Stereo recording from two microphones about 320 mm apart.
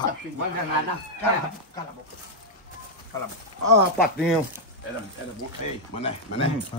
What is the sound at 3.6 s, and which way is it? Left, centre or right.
Speech, right.